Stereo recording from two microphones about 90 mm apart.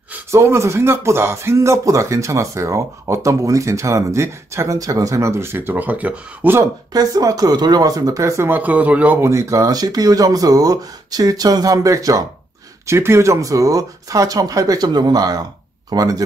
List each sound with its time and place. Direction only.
0.3 s speech: 30° right (ahead or behind)
6.9 s speech: 45° right (ahead or behind); by 9.2 s 15° right (ahead or behind)
9.2 s speech: 35° right (ahead or behind)
12.8 s speech: 30° right (ahead or behind)